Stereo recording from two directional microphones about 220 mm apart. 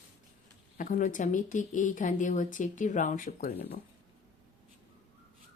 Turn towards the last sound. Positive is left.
turn(degrees=40)  # may be behind; listen again after turning